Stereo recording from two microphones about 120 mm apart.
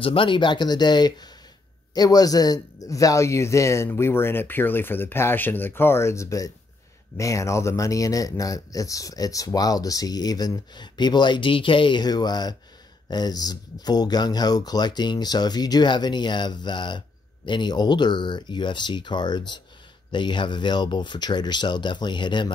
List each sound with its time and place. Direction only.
0.0 s speech: 45° left (ahead or behind)